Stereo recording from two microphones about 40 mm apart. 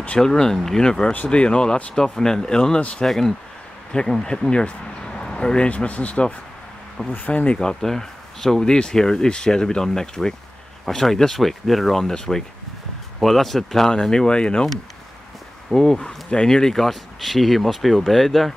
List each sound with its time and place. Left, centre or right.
0.2 s speech: centre
3.1 s speech: centre
3.9 s speech: centre
4.5 s a sound: left
5.7 s speech: left
7.1 s speech: left
7.8 s speech: centre
13.2 s speech: centre
14.0 s speech: centre
15.7 s speech: centre